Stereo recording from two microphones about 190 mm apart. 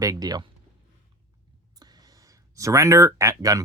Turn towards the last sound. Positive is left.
turn(degrees=-15)  # may be behind; listen again after turning